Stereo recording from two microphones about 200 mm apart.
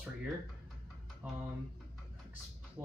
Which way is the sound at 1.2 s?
10° right (ahead or behind).